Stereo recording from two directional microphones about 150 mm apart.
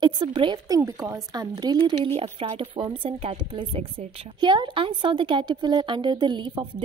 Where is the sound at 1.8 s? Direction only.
40° right (ahead or behind).